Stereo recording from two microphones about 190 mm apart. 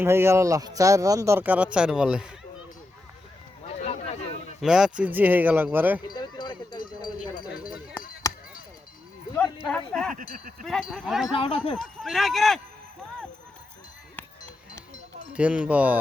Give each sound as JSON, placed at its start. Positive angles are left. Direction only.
{"t": 0.0, "sound": "speech", "side_deg": -15}
{"t": 3.8, "sound": "a sound", "side_deg": 35}
{"t": 4.6, "sound": "speech", "side_deg": -5}
{"t": 6.1, "sound": "sheep", "side_deg": 25}
{"t": 8.0, "sound": "chop", "side_deg": 10}
{"t": 9.3, "sound": "speech", "side_deg": 5}
{"t": 11.3, "sound": "speech", "side_deg": 35}
{"t": 11.7, "sound": "speech", "side_deg": 0}
{"t": 15.3, "sound": "speech", "side_deg": -5}